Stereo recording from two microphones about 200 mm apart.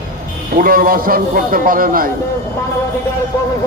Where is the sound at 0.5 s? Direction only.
45° right (ahead or behind).